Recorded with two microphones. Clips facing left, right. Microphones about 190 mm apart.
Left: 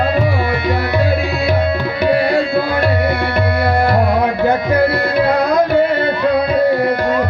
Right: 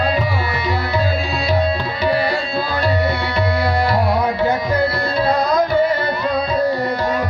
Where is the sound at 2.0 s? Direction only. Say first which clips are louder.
Left 5 dB; 55° left (ahead or behind).